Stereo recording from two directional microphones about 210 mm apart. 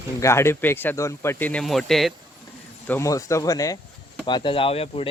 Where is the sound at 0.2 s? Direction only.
15° left (ahead or behind).